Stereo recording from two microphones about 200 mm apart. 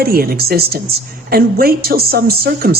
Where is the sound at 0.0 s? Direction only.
50° right (ahead or behind).